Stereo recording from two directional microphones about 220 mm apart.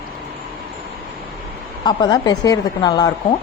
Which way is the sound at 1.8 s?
20° left (ahead or behind).